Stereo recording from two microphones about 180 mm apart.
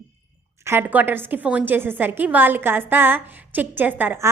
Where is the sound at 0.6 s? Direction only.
10° right (ahead or behind).